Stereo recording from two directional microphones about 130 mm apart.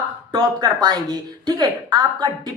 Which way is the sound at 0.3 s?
35° right (ahead or behind).